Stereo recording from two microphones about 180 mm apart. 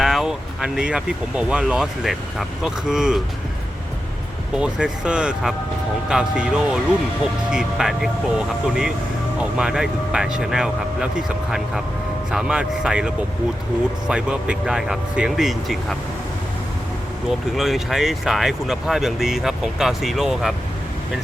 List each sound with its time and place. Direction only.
0.0 s speech: centre (ahead or behind)
4.5 s speech: 5° right (ahead or behind)
12.3 s speech: 5° right (ahead or behind)
17.2 s speech: centre (ahead or behind)